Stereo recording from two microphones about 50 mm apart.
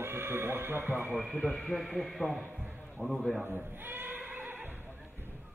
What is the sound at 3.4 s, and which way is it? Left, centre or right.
Speech, right.